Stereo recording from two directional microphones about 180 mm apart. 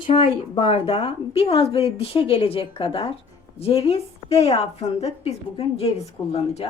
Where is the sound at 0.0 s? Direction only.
30° left (ahead or behind).